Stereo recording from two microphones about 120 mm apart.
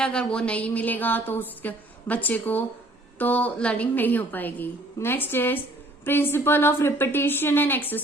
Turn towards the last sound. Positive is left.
turn(degrees=15)  # may be behind; listen again after turning